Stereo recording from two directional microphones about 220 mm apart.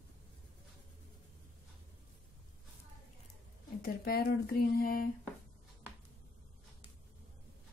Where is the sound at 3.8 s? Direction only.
45° left (ahead or behind).